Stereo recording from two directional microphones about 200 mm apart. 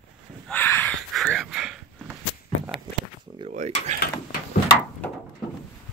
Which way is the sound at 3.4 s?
35° right (ahead or behind).